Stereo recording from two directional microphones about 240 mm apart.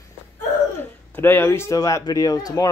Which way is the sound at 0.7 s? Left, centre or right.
Centre.